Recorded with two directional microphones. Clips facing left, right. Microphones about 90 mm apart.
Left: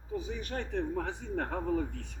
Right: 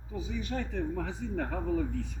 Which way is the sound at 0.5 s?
65° left (ahead or behind).